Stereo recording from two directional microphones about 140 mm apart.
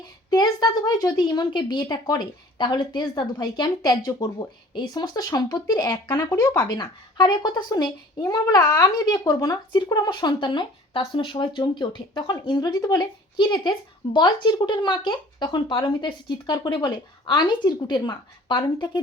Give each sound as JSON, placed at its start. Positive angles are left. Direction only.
{"t": 0.3, "sound": "a woman's voice", "side_deg": 30}